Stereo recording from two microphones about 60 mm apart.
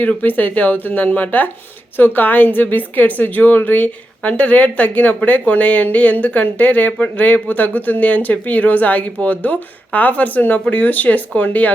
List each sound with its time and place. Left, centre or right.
0.0 s a woman's voice: left